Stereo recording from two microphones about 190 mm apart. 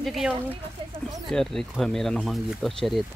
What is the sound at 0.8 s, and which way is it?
Speech, 25° right (ahead or behind).